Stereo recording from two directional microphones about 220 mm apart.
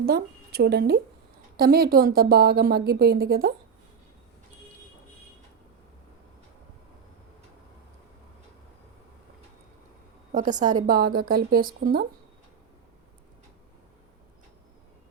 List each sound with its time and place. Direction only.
0.0 s a woman's voice: 45° right (ahead or behind)
10.3 s speech: 35° right (ahead or behind)